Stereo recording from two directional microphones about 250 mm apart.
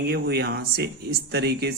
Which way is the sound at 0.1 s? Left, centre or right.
Right.